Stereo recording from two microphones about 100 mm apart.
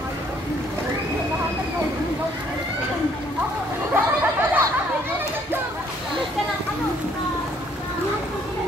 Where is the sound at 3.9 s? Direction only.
20° right (ahead or behind).